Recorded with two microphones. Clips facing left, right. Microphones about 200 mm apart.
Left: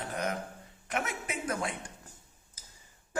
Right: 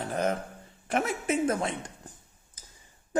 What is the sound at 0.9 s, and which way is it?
Mantra, 30° right (ahead or behind).